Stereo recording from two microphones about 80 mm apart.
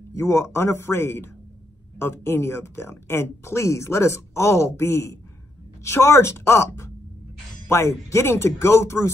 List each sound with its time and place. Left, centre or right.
0.1 s speech: left